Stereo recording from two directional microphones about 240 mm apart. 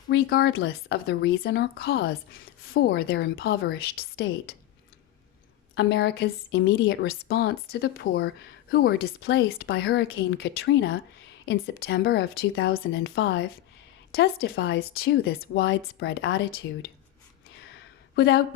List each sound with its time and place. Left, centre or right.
0.1 s speech: left
0.5 s speech: left
5.7 s speech: left
14.1 s speech: left
18.2 s speech: left